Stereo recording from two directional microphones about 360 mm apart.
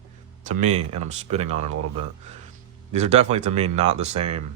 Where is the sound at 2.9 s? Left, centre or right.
Centre.